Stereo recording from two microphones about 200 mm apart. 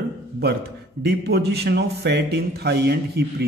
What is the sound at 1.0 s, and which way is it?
A man's voice, 55° right (ahead or behind).